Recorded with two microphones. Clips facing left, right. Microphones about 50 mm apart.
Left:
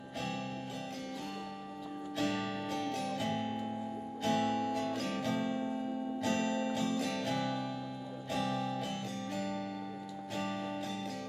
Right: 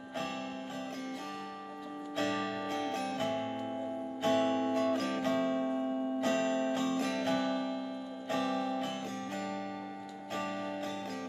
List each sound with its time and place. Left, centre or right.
2.1 s music: right